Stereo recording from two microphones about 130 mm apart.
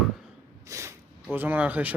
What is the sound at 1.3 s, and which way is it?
Speech, 15° right (ahead or behind).